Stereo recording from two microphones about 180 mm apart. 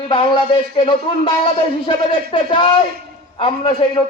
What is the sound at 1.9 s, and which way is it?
A man's voice, 30° left (ahead or behind).